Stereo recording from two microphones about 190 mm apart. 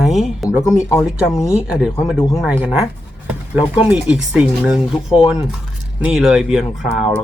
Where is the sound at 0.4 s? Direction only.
15° left (ahead or behind).